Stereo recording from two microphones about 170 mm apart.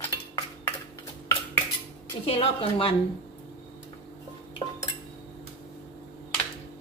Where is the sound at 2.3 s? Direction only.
35° left (ahead or behind).